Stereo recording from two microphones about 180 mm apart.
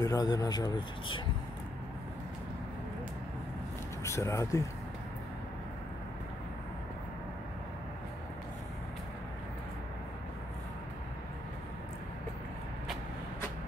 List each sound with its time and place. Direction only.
0.0 s speech: 20° left (ahead or behind)
4.0 s speech: 15° left (ahead or behind)